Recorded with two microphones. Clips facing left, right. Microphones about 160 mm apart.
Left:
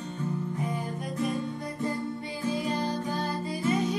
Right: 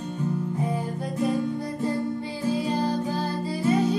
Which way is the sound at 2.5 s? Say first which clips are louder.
Right 4 dB; 30° right (ahead or behind).